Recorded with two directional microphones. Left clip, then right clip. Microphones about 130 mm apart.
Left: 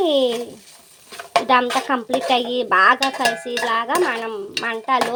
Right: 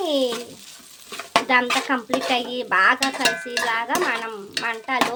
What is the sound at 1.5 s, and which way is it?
Dishes, 35° left (ahead or behind).